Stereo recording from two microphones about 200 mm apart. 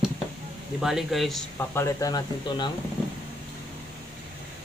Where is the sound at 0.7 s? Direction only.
Centre (ahead or behind).